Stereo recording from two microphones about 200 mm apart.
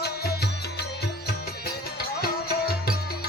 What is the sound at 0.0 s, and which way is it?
Music, 55° left (ahead or behind).